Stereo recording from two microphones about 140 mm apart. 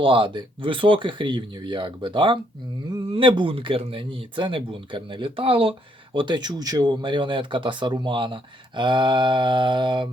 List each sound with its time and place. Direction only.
0.0 s speech: 35° right (ahead or behind)